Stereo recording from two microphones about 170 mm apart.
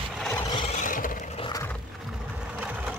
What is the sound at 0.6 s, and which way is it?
Vehicle, 50° left (ahead or behind).